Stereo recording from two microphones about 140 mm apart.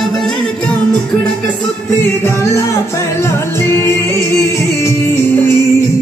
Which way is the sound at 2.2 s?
20° left (ahead or behind).